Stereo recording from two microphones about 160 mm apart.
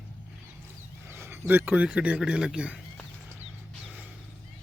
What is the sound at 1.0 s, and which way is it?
A man's voice, 15° right (ahead or behind).